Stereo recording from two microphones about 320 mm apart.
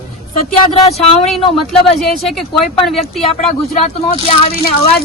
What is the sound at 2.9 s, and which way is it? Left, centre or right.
Speech, centre.